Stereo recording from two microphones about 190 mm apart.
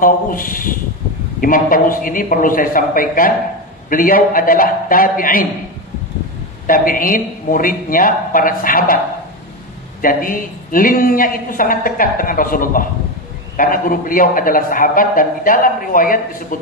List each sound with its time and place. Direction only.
0.0 s speech: 45° left (ahead or behind)
6.7 s speech: 45° left (ahead or behind)
10.0 s speech: 45° left (ahead or behind)